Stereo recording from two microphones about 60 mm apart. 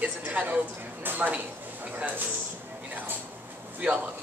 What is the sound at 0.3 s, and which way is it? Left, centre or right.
Speech, right.